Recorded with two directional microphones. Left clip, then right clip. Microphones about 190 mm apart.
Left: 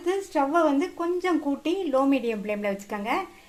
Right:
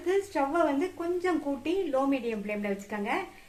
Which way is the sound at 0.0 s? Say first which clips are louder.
Left 3 dB; 45° left (ahead or behind).